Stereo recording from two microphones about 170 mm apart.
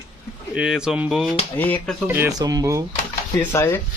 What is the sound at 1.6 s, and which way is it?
Speech, 10° left (ahead or behind).